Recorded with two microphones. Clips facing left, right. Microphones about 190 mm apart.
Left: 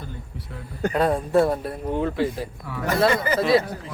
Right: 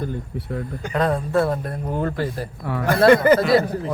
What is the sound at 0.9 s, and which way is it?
Speech, 10° left (ahead or behind).